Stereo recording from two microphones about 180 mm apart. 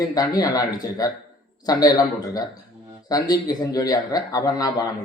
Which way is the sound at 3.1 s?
20° left (ahead or behind).